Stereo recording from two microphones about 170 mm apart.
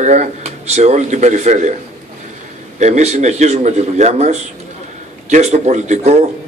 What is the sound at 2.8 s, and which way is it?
A man's voice, 40° right (ahead or behind).